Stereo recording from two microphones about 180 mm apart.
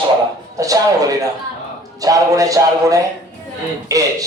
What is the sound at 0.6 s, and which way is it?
Speech, 20° right (ahead or behind).